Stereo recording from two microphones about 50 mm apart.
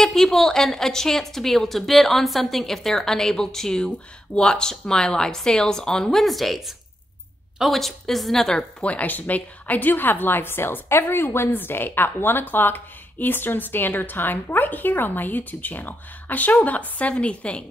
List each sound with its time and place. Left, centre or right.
0.0 s a woman's voice: centre
6.2 s a woman's voice: centre
8.8 s a woman's voice: left